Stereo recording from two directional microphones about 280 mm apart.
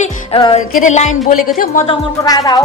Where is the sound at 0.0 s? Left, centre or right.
Centre.